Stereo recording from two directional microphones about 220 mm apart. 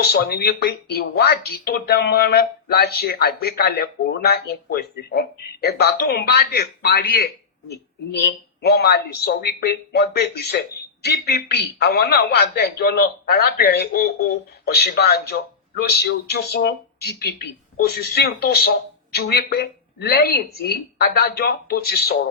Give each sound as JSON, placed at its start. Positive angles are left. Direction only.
{"t": 0.0, "sound": "speech", "side_deg": 45}
{"t": 8.6, "sound": "speech", "side_deg": 45}